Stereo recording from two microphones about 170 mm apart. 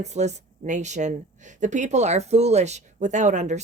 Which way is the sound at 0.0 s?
40° right (ahead or behind).